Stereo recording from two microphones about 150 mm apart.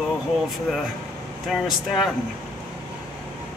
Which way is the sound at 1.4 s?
Centre (ahead or behind).